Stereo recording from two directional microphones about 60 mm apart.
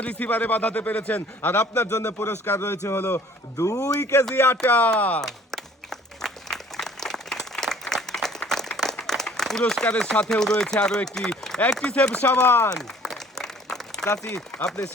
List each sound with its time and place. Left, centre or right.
0.0 s a man's voice: left
1.9 s a man's voice: left
3.6 s speech: left
4.9 s a man's voice: left
5.2 s applause: centre
11.9 s a man's voice: centre
12.5 s a man's voice: left
12.7 s applause: centre
14.3 s speech: centre